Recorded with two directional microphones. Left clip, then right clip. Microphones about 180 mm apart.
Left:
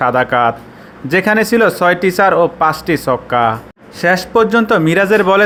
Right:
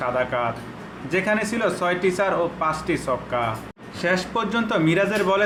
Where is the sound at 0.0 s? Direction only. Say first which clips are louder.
Left 11 dB; 45° left (ahead or behind).